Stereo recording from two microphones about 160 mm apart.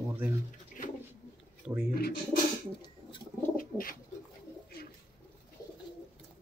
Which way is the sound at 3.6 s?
60° left (ahead or behind).